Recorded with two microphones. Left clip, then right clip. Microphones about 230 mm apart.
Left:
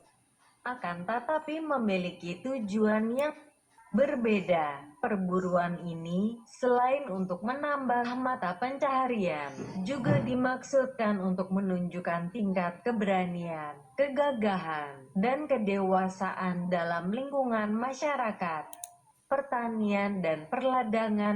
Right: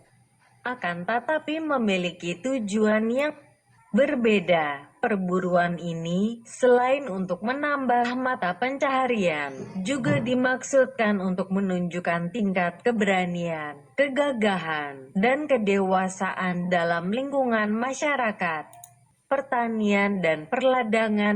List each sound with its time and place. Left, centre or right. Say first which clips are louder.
0.6 s a woman's voice: right 6 dB; right
13.5 s a woman's voice: right 6 dB; right